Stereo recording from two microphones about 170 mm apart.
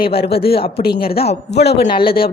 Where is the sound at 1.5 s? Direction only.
80° left.